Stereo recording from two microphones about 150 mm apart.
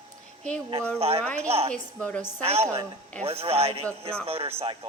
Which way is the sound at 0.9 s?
40° right (ahead or behind).